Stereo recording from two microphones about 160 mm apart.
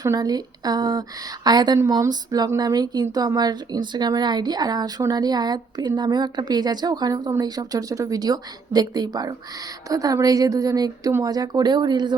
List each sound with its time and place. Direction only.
0.0 s speech: 25° right (ahead or behind)